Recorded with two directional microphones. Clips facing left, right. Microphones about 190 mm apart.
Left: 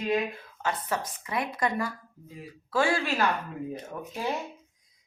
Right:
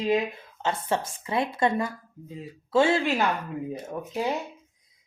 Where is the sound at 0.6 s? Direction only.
25° right (ahead or behind).